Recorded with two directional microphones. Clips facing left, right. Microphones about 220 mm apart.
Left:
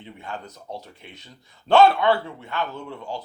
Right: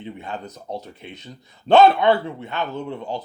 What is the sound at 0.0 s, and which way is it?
Speech, 20° right (ahead or behind).